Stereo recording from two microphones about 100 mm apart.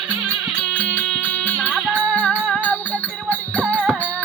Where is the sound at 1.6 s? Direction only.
15° right (ahead or behind).